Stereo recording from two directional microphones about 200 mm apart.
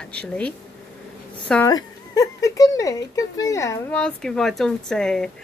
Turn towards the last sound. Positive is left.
turn(degrees=5)  # may be behind; listen again after turning